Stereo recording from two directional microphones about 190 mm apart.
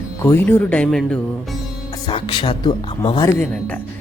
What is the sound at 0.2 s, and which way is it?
Speech, 10° left (ahead or behind).